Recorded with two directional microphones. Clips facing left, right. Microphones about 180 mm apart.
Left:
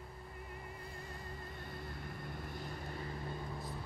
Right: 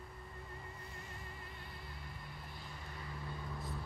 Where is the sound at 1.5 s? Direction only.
50° left (ahead or behind).